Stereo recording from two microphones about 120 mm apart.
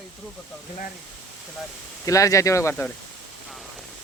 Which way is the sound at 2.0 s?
25° left (ahead or behind).